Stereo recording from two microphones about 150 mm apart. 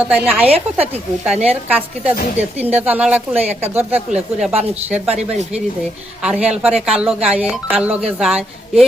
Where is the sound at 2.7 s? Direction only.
10° right (ahead or behind).